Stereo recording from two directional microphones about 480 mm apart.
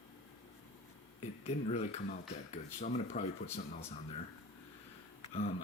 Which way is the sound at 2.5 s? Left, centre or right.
Centre.